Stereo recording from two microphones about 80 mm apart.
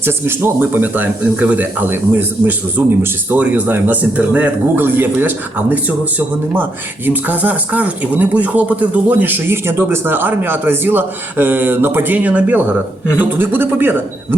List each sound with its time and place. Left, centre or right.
0.0 s speech: right